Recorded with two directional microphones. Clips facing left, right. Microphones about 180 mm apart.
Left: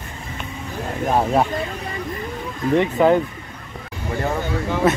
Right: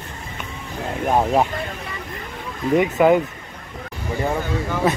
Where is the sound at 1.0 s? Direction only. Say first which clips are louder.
Even; 10° right (ahead or behind).